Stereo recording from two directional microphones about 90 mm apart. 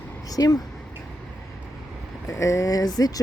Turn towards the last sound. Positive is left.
turn(degrees=45)  # may be behind; listen again after turning